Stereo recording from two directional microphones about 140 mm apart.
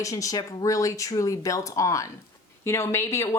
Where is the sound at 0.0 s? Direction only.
25° left (ahead or behind).